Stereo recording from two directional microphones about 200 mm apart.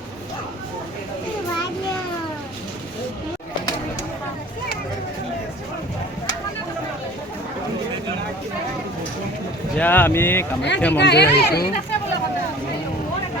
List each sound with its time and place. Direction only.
9.7 s speech: 10° left (ahead or behind)
11.0 s speech: 55° left (ahead or behind)